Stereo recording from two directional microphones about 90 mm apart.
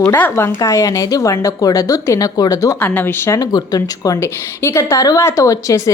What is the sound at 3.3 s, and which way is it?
A woman's voice, 45° left (ahead or behind).